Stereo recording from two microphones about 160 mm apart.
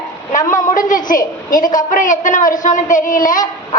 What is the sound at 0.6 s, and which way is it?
A woman's voice, 55° left (ahead or behind).